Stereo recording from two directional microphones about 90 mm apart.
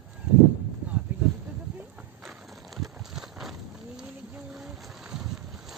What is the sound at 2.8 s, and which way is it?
Clip-clop, centre (ahead or behind).